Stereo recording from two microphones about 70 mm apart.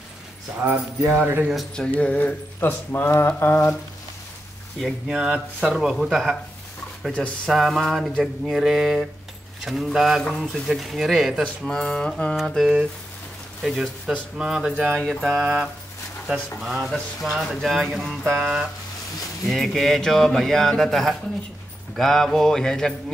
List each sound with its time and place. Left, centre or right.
0.6 s speech: right
1.9 s speech: left
2.6 s speech: left
4.7 s speech: centre
7.1 s a sound: centre
7.5 s speech: centre
10.2 s speech: centre
11.4 s a sound: centre
12.4 s speech: centre
15.0 s speech: centre
21.9 s a sound: centre